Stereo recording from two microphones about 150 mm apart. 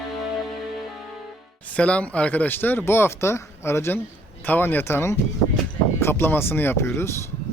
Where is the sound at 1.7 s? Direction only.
10° left (ahead or behind).